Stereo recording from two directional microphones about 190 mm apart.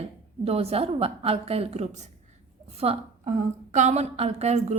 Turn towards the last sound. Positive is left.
turn(degrees=-35)  # may be behind; listen again after turning